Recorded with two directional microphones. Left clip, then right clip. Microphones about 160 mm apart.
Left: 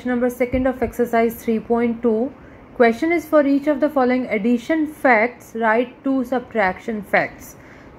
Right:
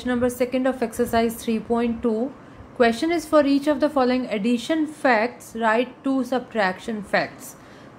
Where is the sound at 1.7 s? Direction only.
15° left (ahead or behind).